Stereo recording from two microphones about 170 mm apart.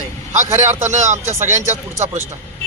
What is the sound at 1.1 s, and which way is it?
Speech, 15° right (ahead or behind).